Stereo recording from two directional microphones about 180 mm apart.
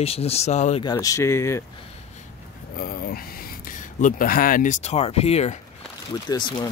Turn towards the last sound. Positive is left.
turn(degrees=25)  # may be behind; listen again after turning